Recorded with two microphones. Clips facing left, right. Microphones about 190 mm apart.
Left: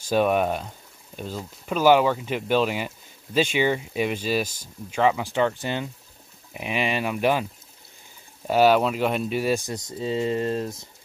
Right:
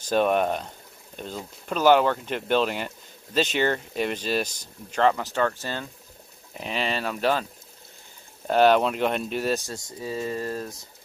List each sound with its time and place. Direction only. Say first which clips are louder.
0.1 s speech: left 1 dB; 5° left (ahead or behind)
8.5 s speech: left 1 dB; 5° left (ahead or behind); by 10.9 s 25° left (ahead or behind)